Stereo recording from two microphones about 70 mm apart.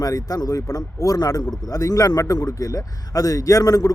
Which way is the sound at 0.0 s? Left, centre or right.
Left.